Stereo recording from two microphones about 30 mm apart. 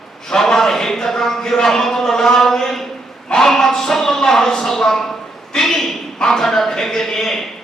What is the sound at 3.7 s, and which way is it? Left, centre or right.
A man's voice, centre.